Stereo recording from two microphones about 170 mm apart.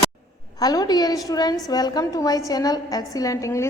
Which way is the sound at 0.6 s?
20° left (ahead or behind).